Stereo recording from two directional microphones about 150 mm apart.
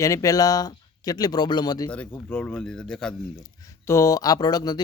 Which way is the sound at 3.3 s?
20° left (ahead or behind).